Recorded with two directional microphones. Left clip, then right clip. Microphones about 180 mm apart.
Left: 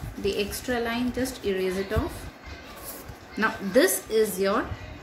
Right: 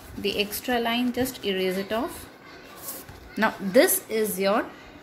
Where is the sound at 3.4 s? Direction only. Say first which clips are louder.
Right 2 dB; 50° right (ahead or behind).